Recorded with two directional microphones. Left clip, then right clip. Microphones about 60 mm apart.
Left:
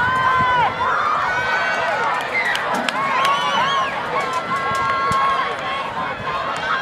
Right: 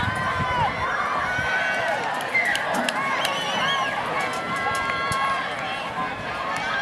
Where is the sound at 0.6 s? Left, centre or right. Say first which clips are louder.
Left 6 dB; left.